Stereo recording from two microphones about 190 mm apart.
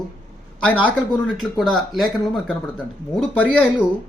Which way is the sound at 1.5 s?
5° left (ahead or behind).